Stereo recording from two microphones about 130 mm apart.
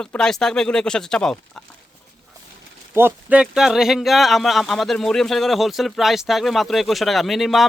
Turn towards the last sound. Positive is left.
turn(degrees=0)  # may be behind; listen again after turning